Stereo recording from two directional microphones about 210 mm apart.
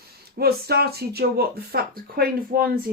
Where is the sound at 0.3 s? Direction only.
45° right (ahead or behind).